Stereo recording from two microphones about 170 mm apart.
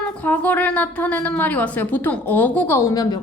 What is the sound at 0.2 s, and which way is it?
A woman's voice, 10° left (ahead or behind).